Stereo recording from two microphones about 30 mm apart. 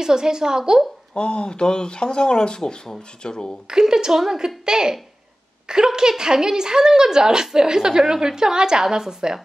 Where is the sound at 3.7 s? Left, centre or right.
Right.